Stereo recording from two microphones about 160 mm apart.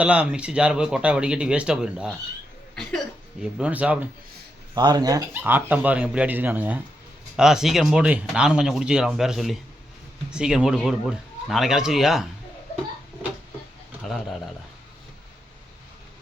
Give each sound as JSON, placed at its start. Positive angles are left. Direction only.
{"t": 0.0, "sound": "speech", "side_deg": -5}
{"t": 3.4, "sound": "speech", "side_deg": -5}
{"t": 4.7, "sound": "speech", "side_deg": -25}
{"t": 5.3, "sound": "speech", "side_deg": -10}
{"t": 14.0, "sound": "speech", "side_deg": 0}